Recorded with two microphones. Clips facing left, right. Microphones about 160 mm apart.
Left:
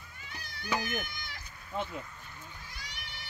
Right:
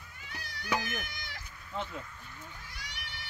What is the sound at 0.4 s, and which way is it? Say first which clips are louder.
Cat: even; 75° right (ahead or behind).